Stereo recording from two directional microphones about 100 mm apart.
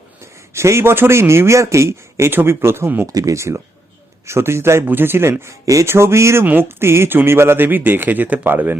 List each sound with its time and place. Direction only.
0.2 s speech: 30° right (ahead or behind)
3.1 s speech: 35° right (ahead or behind); by 8.8 s 20° right (ahead or behind)